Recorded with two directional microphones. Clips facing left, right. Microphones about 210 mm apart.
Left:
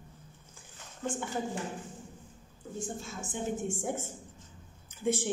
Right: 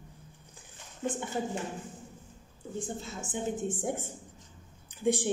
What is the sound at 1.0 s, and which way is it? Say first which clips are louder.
Speech: right 2 dB; 20° right (ahead or behind).